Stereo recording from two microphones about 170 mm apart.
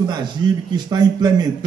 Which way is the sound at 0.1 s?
25° right (ahead or behind).